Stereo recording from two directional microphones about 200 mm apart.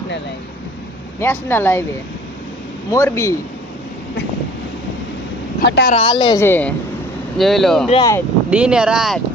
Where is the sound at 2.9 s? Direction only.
15° left (ahead or behind).